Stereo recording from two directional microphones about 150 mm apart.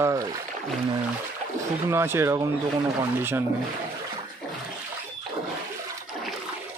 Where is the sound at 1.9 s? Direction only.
15° right (ahead or behind).